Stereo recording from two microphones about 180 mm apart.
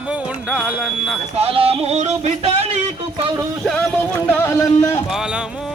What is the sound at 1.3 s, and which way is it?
Speech, 35° right (ahead or behind).